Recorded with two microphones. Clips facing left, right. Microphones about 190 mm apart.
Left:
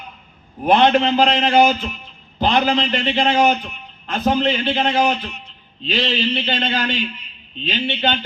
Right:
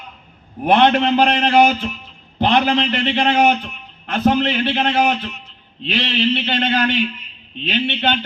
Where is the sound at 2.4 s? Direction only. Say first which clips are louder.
Right 1 dB; 60° right (ahead or behind).